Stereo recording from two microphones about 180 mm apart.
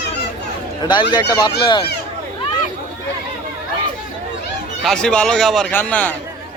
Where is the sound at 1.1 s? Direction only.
25° left (ahead or behind).